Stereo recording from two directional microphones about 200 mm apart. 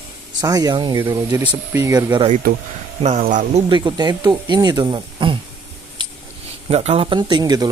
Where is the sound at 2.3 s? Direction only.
45° right (ahead or behind).